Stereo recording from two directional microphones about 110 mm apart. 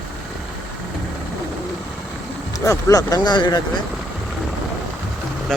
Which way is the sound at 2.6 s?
30° left (ahead or behind).